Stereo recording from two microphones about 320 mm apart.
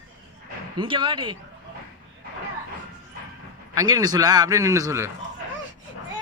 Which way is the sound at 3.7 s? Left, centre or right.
Centre.